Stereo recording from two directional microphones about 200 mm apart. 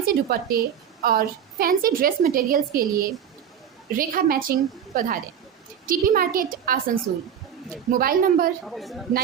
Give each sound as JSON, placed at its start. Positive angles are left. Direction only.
{"t": 0.1, "sound": "a woman's voice", "side_deg": -50}
{"t": 8.6, "sound": "a woman's voice", "side_deg": 0}